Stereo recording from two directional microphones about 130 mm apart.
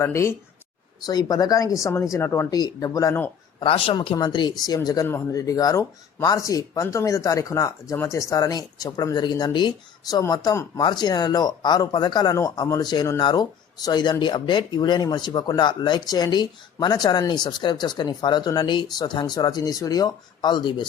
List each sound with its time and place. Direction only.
0.0 s speech: 20° left (ahead or behind)
1.0 s speech: 30° left (ahead or behind)
3.6 s speech: 45° left (ahead or behind)